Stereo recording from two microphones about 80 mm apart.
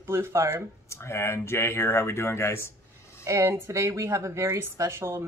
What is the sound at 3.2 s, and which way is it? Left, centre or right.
Speech, right.